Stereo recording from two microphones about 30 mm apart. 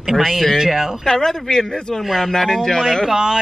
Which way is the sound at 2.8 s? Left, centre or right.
Centre.